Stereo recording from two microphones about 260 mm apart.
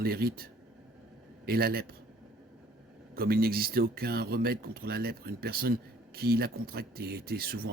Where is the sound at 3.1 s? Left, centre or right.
Right.